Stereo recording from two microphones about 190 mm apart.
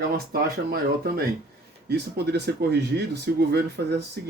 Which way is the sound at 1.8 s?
60° right (ahead or behind).